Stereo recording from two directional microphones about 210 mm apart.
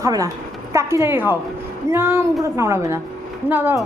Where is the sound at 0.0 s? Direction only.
15° right (ahead or behind).